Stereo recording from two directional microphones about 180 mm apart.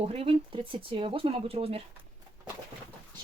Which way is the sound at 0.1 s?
30° right (ahead or behind).